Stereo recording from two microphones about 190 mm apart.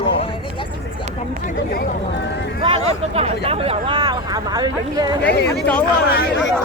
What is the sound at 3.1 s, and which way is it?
Speech, 30° right (ahead or behind).